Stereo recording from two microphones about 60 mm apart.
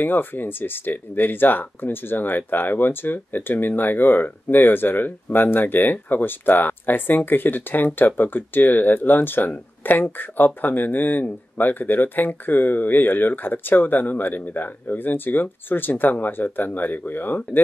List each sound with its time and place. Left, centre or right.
0.0 s speech: left